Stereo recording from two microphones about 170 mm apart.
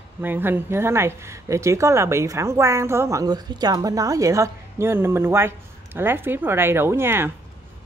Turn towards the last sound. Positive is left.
turn(degrees=-15)  # may be behind; listen again after turning